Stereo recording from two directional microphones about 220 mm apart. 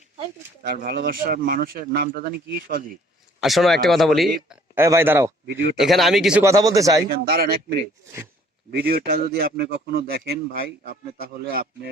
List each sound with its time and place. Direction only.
0.7 s speech: 45° right (ahead or behind)
3.4 s speech: centre (ahead or behind)
5.5 s a man's voice: 55° right (ahead or behind)
5.8 s speech: centre (ahead or behind)
6.4 s speech: 15° right (ahead or behind)
7.1 s a man's voice: 45° right (ahead or behind)
8.7 s a man's voice: 45° right (ahead or behind)